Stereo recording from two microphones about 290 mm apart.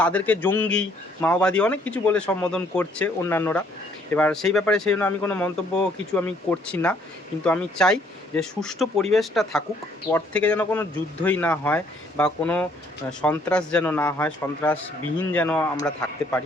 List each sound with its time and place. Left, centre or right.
0.0 s speech: centre